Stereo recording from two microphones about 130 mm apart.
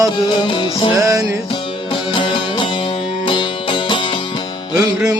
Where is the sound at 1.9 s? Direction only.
40° left (ahead or behind).